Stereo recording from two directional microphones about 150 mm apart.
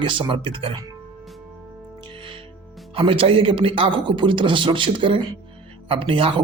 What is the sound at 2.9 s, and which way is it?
Speech, 35° right (ahead or behind).